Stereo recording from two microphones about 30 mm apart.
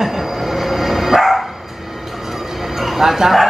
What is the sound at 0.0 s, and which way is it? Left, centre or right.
Bow-wow, centre.